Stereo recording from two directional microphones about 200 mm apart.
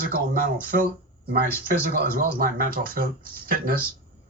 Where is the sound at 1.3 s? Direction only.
45° right (ahead or behind).